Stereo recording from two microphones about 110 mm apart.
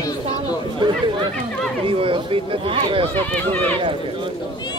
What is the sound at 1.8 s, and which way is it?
Speech, 55° right (ahead or behind).